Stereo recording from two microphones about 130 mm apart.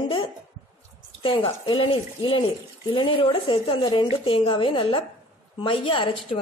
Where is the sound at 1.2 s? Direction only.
40° left (ahead or behind).